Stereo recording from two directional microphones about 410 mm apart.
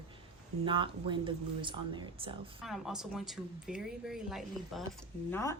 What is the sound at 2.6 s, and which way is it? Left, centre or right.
Speech, centre.